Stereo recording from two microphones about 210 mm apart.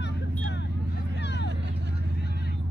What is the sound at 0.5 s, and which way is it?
Vehicle, 55° left (ahead or behind).